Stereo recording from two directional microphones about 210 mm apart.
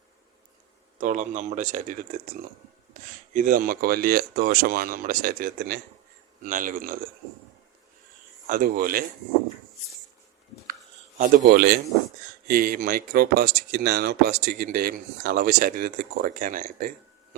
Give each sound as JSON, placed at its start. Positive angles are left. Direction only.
{"t": 0.9, "sound": "speech", "side_deg": -35}
{"t": 8.4, "sound": "speech", "side_deg": -45}
{"t": 11.2, "sound": "speech", "side_deg": -45}